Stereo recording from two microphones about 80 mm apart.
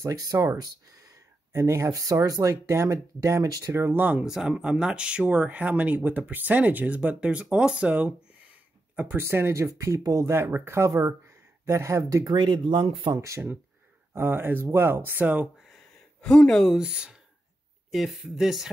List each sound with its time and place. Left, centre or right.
0.0 s speech: right
1.5 s speech: right
2.0 s speech: right
3.7 s speech: right
4.3 s speech: centre
9.1 s speech: right
10.3 s speech: right
12.3 s speech: right
14.1 s speech: right
15.6 s a sound: centre
16.7 s speech: centre
18.2 s speech: centre